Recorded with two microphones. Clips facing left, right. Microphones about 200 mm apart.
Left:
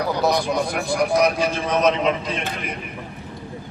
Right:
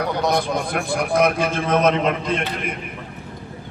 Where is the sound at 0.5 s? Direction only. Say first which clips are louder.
Even; 55° right (ahead or behind).